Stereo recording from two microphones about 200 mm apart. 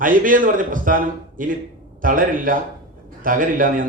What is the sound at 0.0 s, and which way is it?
A man's voice, 40° right (ahead or behind).